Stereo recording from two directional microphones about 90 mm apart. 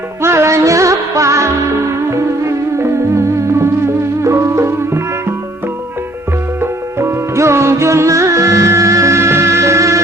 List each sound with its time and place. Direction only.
0.2 s music: 30° right (ahead or behind)
6.6 s music: 30° right (ahead or behind)